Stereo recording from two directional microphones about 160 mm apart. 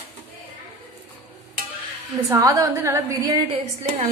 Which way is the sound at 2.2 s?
20° right (ahead or behind).